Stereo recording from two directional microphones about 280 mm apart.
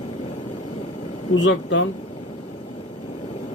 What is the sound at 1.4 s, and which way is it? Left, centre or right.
Speech, left.